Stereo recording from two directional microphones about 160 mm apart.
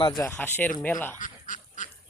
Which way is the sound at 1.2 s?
55° left (ahead or behind).